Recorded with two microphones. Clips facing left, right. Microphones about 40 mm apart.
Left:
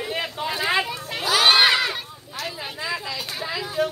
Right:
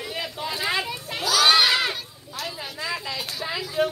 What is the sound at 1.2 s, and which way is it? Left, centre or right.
Children playing, left.